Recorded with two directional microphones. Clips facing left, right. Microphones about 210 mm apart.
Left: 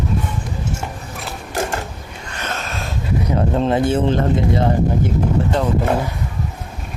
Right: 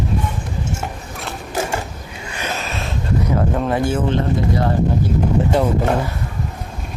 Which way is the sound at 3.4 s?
25° left (ahead or behind).